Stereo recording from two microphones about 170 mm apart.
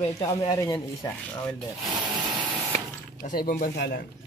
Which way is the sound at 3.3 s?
60° left (ahead or behind).